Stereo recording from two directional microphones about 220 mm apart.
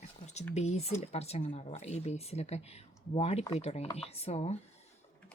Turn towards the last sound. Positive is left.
turn(degrees=30)  # may be behind; listen again after turning